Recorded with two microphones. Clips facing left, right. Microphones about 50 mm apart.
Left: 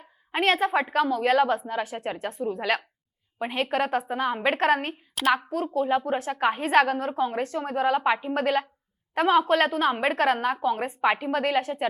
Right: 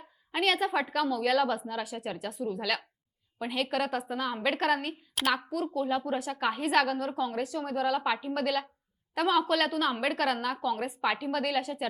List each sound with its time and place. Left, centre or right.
0.3 s a woman's voice: left